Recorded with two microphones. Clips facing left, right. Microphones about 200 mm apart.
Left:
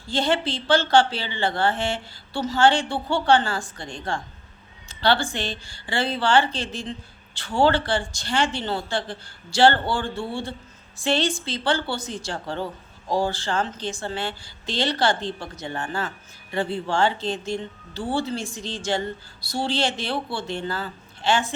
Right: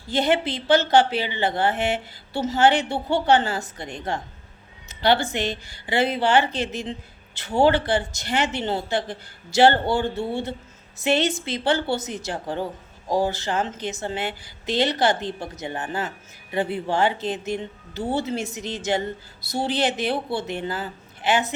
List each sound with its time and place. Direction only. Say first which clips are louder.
0.1 s a woman's voice: right 2 dB; 20° right (ahead or behind)